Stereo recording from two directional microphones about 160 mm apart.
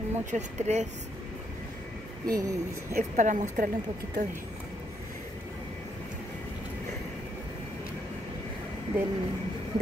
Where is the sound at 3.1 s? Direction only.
50° right (ahead or behind).